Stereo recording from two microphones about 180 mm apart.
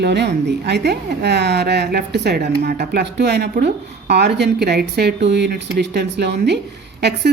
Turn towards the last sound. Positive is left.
turn(degrees=-65)  # may be behind; listen again after turning